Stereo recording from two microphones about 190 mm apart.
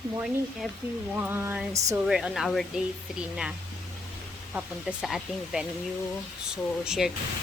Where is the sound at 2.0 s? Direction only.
Centre (ahead or behind).